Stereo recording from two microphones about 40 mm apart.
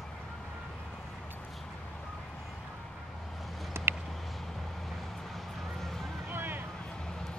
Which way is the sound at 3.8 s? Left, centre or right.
Right.